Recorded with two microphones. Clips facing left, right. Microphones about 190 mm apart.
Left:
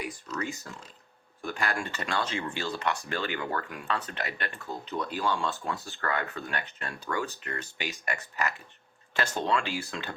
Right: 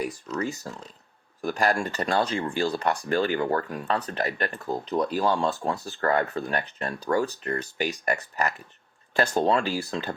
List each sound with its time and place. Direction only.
0.3 s speech: 35° right (ahead or behind)